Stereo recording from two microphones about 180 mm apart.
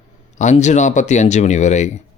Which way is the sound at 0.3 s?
40° left (ahead or behind).